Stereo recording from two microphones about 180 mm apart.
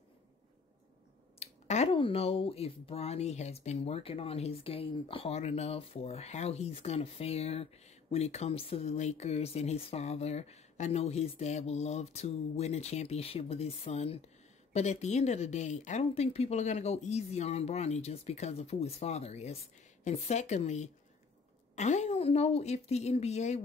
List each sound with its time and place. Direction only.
1.4 s speech: 35° left (ahead or behind)